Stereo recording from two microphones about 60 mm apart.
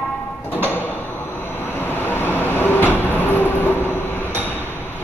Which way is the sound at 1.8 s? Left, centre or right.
Left.